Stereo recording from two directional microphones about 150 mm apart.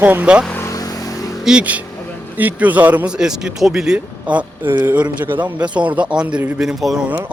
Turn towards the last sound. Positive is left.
turn(degrees=-5)  # may be behind; listen again after turning